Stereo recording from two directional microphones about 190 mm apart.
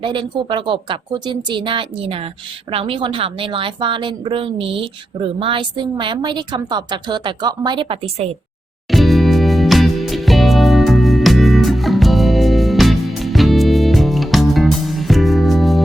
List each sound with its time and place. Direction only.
0.0 s a woman's voice: 25° right (ahead or behind)
8.9 s music: centre (ahead or behind)